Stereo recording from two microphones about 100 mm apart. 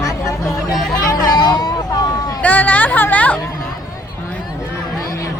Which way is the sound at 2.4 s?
15° left (ahead or behind).